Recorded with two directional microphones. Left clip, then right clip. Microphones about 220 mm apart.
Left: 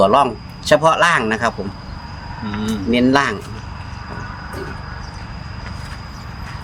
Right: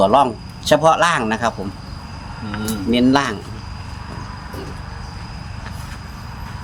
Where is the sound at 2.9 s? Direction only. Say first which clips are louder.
Left 1 dB; centre (ahead or behind).